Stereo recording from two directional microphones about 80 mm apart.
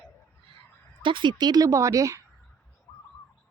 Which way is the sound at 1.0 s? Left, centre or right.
Right.